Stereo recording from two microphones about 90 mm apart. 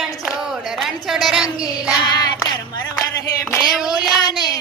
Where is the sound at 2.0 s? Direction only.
50° left (ahead or behind).